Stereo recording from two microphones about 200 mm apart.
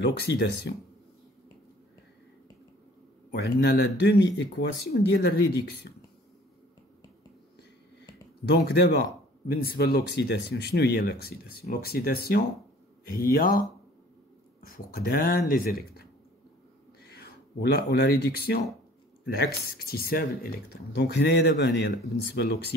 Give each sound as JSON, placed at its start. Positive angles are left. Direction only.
{"t": 0.3, "sound": "speech", "side_deg": 65}
{"t": 3.4, "sound": "speech", "side_deg": 55}
{"t": 8.5, "sound": "speech", "side_deg": 55}
{"t": 17.6, "sound": "speech", "side_deg": 50}